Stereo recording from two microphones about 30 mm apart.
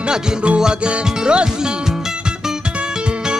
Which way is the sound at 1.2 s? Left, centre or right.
Right.